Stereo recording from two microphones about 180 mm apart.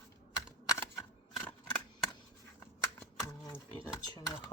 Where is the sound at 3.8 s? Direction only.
20° left (ahead or behind).